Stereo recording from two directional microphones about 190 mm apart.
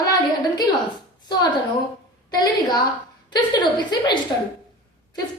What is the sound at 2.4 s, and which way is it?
A woman's voice, 20° left (ahead or behind).